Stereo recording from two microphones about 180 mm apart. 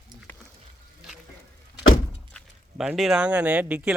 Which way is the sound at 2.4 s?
Centre (ahead or behind).